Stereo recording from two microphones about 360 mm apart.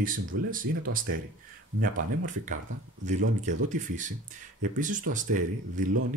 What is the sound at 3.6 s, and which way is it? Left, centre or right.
Speech, right.